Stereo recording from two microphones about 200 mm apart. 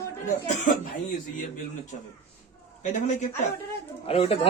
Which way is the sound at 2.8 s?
35° left (ahead or behind).